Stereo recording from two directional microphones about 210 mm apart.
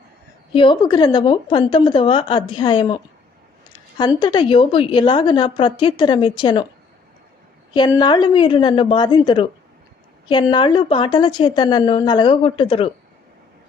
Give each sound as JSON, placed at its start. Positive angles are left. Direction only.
{"t": 0.5, "sound": "a woman's voice", "side_deg": 25}
{"t": 7.7, "sound": "a woman's voice", "side_deg": 20}